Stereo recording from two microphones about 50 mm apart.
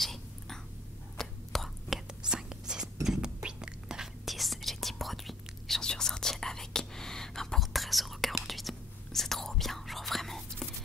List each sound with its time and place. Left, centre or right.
0.0 s whispering: centre
3.4 s a sound: centre
4.3 s whispering: centre
5.8 s whispering: centre